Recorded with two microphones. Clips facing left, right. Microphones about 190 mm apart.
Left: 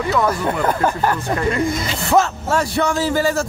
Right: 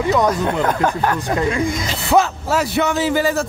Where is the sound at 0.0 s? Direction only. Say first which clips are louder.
Right 2 dB; 20° right (ahead or behind).